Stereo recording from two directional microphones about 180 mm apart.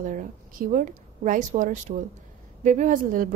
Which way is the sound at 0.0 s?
45° right (ahead or behind).